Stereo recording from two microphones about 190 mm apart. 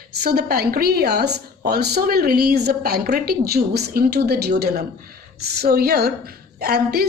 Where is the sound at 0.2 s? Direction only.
55° right (ahead or behind).